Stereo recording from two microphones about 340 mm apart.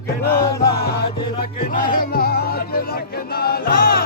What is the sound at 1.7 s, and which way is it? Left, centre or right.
Music, left.